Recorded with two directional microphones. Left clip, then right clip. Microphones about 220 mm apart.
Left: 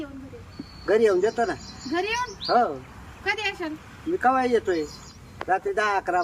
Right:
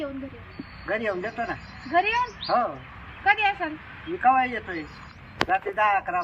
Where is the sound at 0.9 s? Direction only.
25° left (ahead or behind).